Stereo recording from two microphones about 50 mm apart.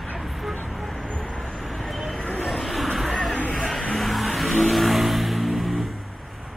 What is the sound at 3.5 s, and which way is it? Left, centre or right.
Vehicle, centre.